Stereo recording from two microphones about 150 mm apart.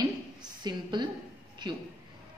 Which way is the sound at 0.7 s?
30° right (ahead or behind).